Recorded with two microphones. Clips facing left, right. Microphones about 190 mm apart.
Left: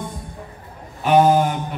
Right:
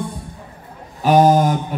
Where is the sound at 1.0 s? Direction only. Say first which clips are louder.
Right 2 dB; 40° right (ahead or behind).